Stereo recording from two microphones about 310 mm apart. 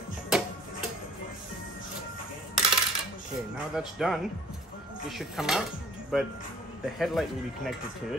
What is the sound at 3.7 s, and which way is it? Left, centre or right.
Speech, centre.